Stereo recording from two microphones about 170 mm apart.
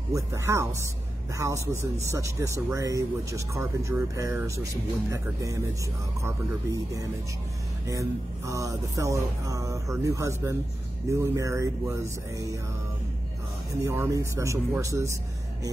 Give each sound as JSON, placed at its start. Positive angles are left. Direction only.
{"t": 0.1, "sound": "speech", "side_deg": -15}
{"t": 5.1, "sound": "music", "side_deg": -20}
{"t": 13.8, "sound": "speech", "side_deg": -15}